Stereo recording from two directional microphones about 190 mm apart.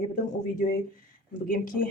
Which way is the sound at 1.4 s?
45° left (ahead or behind).